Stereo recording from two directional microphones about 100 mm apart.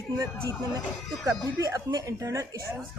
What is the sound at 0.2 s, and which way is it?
Speech, 40° right (ahead or behind).